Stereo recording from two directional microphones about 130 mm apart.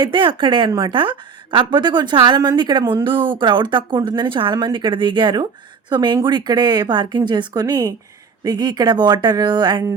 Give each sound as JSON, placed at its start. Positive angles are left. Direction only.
{"t": 0.0, "sound": "a woman's voice", "side_deg": -40}